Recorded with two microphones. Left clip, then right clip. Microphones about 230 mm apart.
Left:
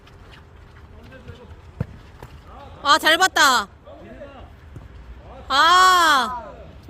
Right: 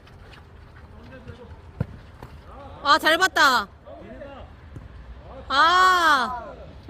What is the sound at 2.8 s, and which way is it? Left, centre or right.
Speech, centre.